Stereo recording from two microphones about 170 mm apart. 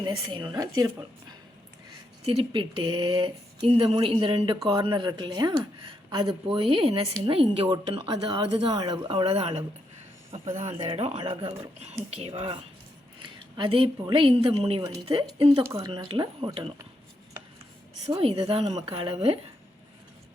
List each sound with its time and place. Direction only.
0.0 s speech: 25° right (ahead or behind)
2.2 s speech: 30° right (ahead or behind)
18.2 s speech: 35° right (ahead or behind)